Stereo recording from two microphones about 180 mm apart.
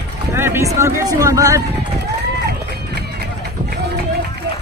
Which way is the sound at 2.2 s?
65° right (ahead or behind).